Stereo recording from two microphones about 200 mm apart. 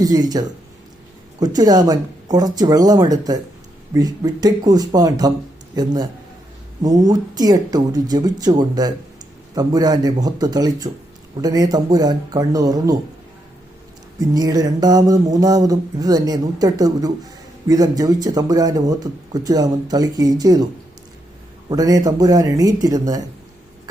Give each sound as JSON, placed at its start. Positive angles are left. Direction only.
{"t": 0.0, "sound": "speech", "side_deg": -20}
{"t": 14.2, "sound": "speech", "side_deg": -20}
{"t": 21.7, "sound": "speech", "side_deg": -20}